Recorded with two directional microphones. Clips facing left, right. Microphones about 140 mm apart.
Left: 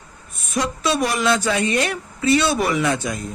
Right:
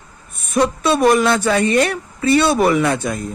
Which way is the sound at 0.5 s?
55° right (ahead or behind).